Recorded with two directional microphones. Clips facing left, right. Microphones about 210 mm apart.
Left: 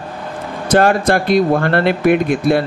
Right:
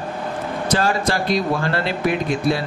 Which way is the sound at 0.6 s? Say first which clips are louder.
Left 8 dB; 55° left (ahead or behind).